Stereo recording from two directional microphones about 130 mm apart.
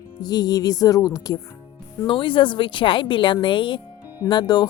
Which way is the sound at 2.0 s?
40° left (ahead or behind).